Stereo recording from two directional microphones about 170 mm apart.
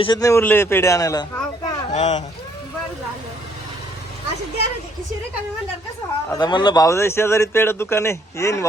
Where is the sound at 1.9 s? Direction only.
40° left (ahead or behind).